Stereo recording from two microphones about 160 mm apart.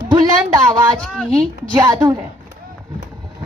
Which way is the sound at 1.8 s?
15° right (ahead or behind).